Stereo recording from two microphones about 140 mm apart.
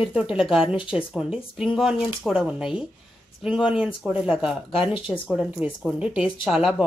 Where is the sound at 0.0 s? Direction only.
5° right (ahead or behind).